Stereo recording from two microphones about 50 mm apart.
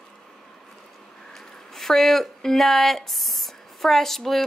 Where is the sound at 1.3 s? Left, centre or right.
Centre.